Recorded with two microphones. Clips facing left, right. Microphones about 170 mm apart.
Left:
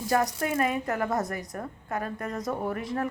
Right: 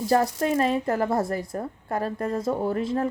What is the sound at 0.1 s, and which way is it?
A woman's voice, 30° right (ahead or behind).